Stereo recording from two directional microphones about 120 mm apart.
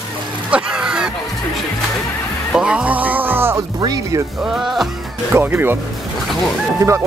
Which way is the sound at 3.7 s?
35° right (ahead or behind).